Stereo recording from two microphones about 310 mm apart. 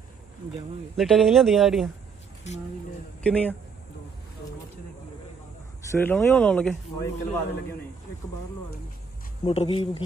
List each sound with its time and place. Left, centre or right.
0.9 s speech: centre
3.3 s speech: centre
5.9 s speech: centre
9.4 s speech: centre